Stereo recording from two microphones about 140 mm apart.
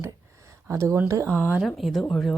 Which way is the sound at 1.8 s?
Centre (ahead or behind).